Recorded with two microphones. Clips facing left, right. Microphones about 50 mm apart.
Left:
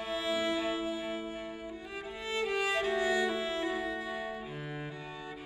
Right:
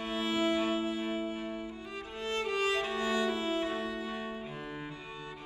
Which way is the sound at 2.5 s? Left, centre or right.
Centre.